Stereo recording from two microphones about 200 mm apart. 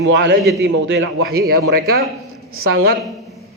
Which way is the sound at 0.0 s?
60° right (ahead or behind).